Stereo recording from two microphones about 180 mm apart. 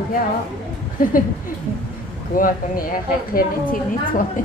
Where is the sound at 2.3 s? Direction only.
50° left (ahead or behind).